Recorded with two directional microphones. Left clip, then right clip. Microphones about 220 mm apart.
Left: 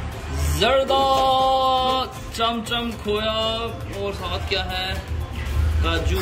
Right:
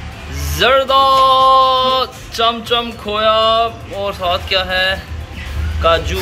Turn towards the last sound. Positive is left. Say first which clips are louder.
# right 11 dB
turn(degrees=5)  # may be behind; listen again after turning